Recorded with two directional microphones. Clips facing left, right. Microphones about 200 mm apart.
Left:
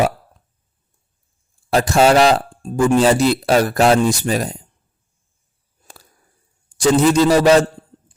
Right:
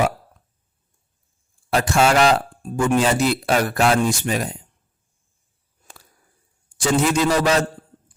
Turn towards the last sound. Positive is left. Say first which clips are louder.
# left 6 dB
turn(degrees=35)  # may be behind; listen again after turning